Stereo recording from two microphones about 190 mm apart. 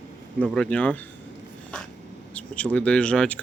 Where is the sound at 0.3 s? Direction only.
5° left (ahead or behind).